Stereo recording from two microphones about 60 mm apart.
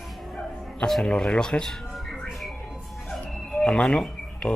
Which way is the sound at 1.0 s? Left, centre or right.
Centre.